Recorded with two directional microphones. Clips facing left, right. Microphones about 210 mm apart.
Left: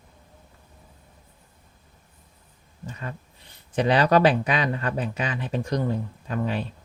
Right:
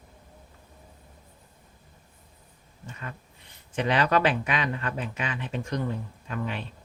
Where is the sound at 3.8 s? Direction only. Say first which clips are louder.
Left 5 dB; 35° left (ahead or behind).